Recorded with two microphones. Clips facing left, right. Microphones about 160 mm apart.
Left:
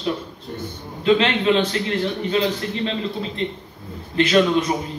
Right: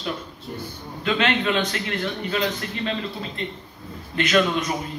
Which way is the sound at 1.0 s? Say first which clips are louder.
Left 5 dB; 30° left (ahead or behind).